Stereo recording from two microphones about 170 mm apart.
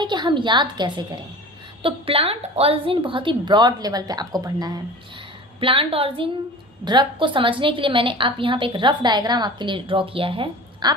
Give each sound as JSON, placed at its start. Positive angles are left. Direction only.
{"t": 0.0, "sound": "a woman's voice", "side_deg": -25}